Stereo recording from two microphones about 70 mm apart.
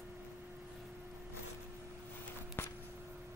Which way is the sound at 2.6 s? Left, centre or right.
Left.